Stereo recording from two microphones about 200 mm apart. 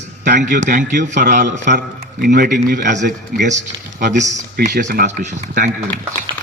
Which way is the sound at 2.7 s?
60° right (ahead or behind).